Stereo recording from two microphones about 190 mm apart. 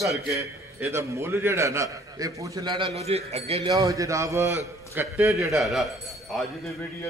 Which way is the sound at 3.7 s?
15° right (ahead or behind).